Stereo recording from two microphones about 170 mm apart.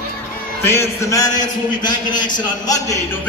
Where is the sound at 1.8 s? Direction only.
25° left (ahead or behind).